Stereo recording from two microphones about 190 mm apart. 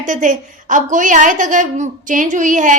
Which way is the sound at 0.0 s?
40° right (ahead or behind).